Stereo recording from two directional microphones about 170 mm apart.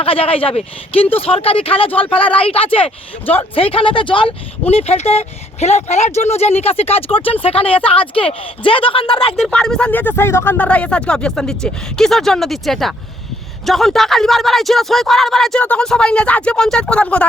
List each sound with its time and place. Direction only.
0.0 s speech: 35° left (ahead or behind)
9.3 s speech: 5° left (ahead or behind)